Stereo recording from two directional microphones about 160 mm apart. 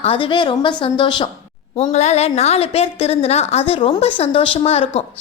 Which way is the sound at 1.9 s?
45° left (ahead or behind).